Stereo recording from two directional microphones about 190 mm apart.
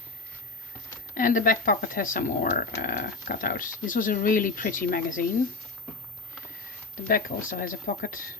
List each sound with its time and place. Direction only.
1.1 s speech: 45° left (ahead or behind)
7.1 s speech: 45° left (ahead or behind)